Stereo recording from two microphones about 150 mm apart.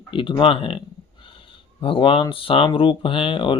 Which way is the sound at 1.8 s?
35° left (ahead or behind).